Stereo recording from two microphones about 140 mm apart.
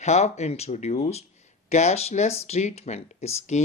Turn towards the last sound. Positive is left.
turn(degrees=55)  # may be behind; listen again after turning